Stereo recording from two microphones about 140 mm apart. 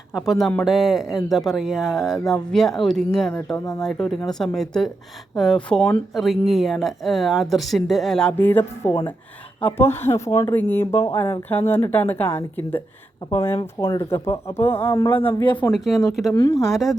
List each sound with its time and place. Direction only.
0.3 s speech: centre (ahead or behind)
15.4 s speech: 35° left (ahead or behind)
15.7 s speech: centre (ahead or behind)
16.5 s speech: 20° left (ahead or behind)
16.7 s speech: centre (ahead or behind)